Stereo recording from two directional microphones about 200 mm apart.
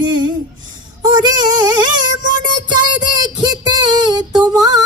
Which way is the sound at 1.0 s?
20° right (ahead or behind).